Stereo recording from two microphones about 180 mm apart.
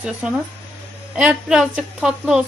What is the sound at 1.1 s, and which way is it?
A woman's voice, 5° right (ahead or behind).